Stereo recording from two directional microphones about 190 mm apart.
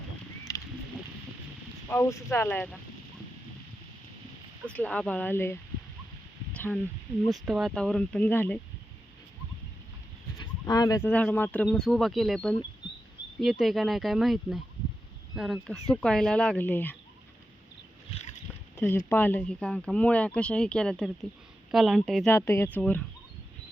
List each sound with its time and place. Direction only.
0.5 s a sound: 15° left (ahead or behind)
1.9 s speech: 15° left (ahead or behind)
4.6 s speech: 5° left (ahead or behind)
6.5 s a sound: 10° left (ahead or behind)
7.3 s speech: centre (ahead or behind)
10.3 s speech: 20° left (ahead or behind)
18.1 s boat: 35° left (ahead or behind)
18.8 s speech: 10° left (ahead or behind)
22.4 s speech: 15° left (ahead or behind)